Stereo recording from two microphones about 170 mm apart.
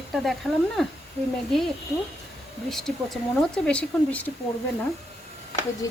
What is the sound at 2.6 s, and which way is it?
Speech, 5° left (ahead or behind).